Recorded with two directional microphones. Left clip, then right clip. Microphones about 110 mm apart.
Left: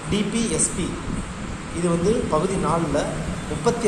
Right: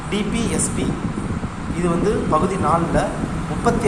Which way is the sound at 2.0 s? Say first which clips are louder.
Right 3 dB; 20° right (ahead or behind).